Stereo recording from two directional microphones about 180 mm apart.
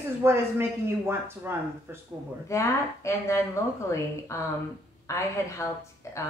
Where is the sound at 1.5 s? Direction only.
15° right (ahead or behind).